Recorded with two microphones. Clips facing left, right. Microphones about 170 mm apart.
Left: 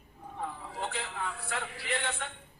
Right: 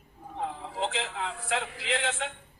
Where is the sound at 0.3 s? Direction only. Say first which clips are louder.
Right 5 dB; 90° right.